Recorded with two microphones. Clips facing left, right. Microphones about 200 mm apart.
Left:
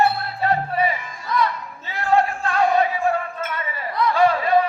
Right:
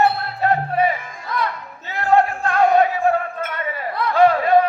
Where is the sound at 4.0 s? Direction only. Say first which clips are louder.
Right 3 dB; 55° right (ahead or behind).